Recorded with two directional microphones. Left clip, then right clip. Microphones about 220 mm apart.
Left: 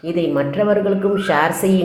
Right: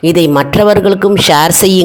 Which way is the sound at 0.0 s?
50° right (ahead or behind).